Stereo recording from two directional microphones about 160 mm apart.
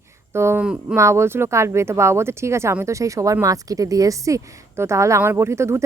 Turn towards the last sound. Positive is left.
turn(degrees=-15)  # may be behind; listen again after turning